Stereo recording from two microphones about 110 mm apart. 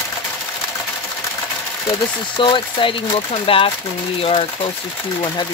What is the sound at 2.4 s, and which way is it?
Speech, 50° left (ahead or behind).